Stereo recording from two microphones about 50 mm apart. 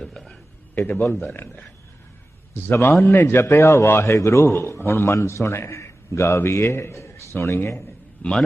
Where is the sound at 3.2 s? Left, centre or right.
Left.